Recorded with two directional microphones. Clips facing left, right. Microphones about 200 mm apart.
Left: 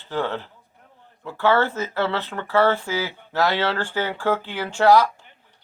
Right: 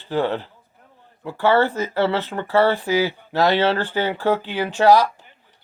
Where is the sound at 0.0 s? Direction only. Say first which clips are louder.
Right 4 dB; 15° right (ahead or behind).